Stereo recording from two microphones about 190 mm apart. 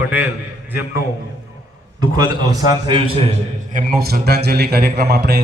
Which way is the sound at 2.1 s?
20° right (ahead or behind).